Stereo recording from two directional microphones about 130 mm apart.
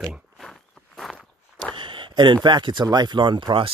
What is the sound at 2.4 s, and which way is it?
Speech, 35° right (ahead or behind).